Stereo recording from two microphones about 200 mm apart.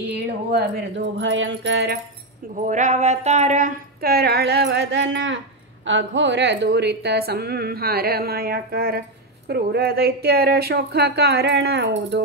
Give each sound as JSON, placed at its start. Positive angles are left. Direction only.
{"t": 0.1, "sound": "music", "side_deg": -60}
{"t": 2.5, "sound": "a woman's voice", "side_deg": -40}